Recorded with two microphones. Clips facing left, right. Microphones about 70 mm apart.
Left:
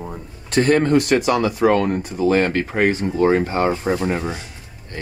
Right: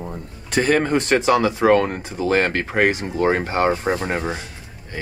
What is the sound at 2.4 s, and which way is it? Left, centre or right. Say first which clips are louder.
Speech: left 1 dB; right.